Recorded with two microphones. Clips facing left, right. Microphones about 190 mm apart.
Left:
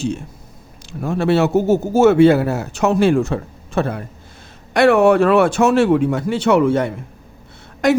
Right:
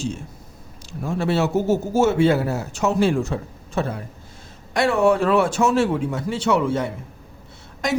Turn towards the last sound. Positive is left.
turn(degrees=60)  # may be behind; listen again after turning